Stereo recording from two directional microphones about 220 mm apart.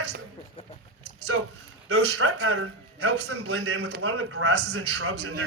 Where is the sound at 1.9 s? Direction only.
75° right (ahead or behind).